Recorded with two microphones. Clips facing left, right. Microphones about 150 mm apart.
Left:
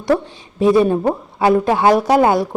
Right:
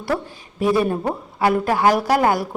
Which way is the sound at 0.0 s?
20° left (ahead or behind).